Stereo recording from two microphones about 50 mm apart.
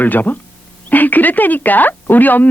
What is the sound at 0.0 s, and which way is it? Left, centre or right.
Speech, left.